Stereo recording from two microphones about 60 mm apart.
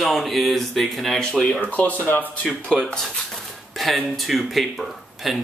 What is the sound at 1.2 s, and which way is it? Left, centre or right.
Speech, centre.